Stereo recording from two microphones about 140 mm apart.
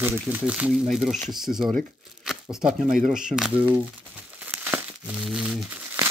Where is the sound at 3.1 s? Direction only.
5° right (ahead or behind).